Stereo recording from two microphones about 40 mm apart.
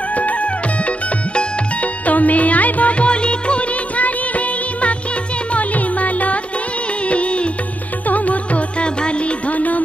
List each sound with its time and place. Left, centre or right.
0.1 s music: left
9.5 s music: left